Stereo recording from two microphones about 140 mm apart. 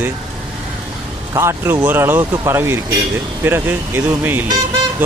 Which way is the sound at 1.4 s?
20° right (ahead or behind).